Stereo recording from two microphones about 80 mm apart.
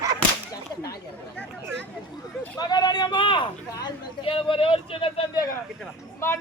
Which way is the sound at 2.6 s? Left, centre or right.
Left.